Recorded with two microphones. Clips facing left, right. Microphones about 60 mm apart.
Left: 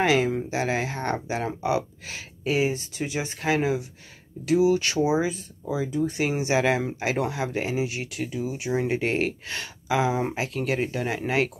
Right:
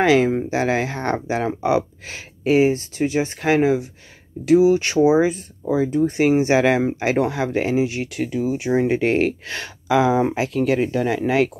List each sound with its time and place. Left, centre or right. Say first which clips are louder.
0.0 s speech: right 6 dB; right
2.7 s speech: right 8 dB; right
4.5 s speech: right 6 dB; right
9.9 s speech: right 7 dB; right
10.8 s speech: right 7 dB; right